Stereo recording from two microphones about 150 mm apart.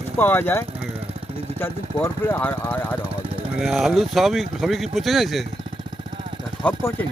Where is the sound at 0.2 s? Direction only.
15° left (ahead or behind).